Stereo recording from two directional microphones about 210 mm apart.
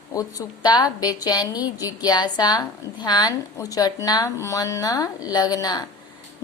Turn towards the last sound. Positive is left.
turn(degrees=20)  # may be behind; listen again after turning